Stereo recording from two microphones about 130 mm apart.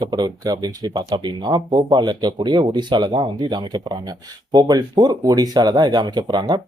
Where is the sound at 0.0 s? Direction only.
30° right (ahead or behind).